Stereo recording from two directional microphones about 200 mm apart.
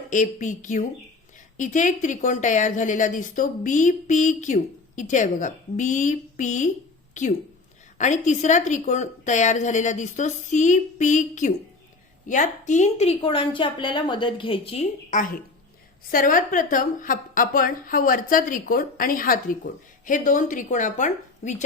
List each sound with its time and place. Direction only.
0.1 s a woman's voice: 40° left (ahead or behind)
14.7 s a woman's voice: 35° left (ahead or behind)